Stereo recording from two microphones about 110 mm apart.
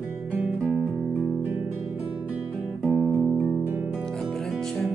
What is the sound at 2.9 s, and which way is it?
Music, 5° right (ahead or behind).